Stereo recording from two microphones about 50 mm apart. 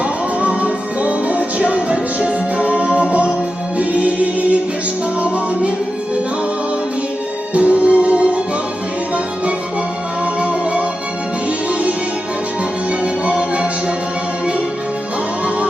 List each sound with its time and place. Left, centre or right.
0.0 s music: right
3.8 s choir: right
7.5 s music: right
10.4 s music: right
13.2 s music: right